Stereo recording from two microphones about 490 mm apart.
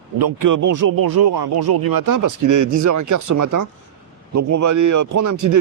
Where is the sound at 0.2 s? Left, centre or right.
Right.